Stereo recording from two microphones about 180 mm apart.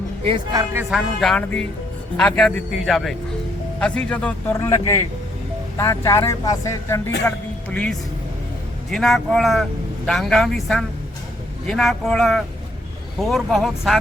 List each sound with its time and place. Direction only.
0.3 s speech: 25° right (ahead or behind)
0.7 s speech: 15° right (ahead or behind)
0.9 s speech: centre (ahead or behind)